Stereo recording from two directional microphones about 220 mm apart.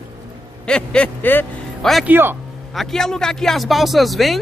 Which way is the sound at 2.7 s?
Centre (ahead or behind).